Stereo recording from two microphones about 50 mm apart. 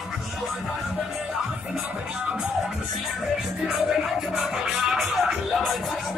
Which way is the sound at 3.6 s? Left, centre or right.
Centre.